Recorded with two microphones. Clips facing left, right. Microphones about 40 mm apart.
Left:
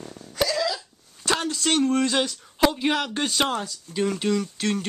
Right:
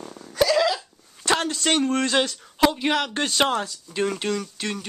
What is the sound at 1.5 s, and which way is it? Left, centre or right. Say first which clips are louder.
Speech: even; centre.